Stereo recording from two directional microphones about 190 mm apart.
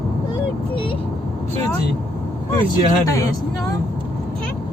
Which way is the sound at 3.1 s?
20° left (ahead or behind).